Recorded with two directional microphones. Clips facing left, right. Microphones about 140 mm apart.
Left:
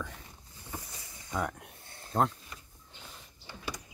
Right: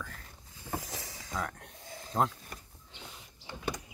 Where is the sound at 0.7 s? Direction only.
90° right.